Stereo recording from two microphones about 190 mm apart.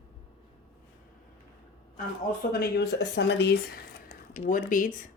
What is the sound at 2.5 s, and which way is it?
Speech, 55° left (ahead or behind).